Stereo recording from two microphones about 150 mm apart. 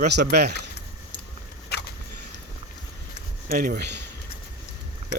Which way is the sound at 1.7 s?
90° left.